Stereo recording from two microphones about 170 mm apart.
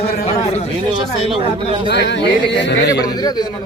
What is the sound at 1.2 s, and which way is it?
Speech, 35° right (ahead or behind).